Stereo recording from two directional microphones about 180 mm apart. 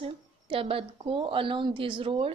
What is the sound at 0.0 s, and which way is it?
A woman's voice, 30° right (ahead or behind).